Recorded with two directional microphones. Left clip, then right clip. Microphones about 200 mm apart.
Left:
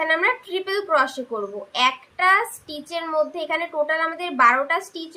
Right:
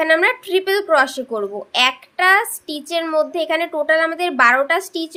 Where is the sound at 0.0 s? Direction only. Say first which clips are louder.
Right 5 dB; 45° right (ahead or behind).